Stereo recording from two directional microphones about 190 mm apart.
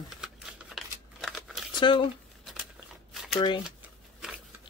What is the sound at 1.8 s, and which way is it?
Speech, 25° left (ahead or behind).